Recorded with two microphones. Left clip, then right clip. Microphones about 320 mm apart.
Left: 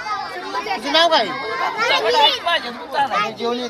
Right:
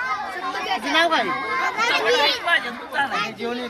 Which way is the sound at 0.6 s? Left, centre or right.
Centre.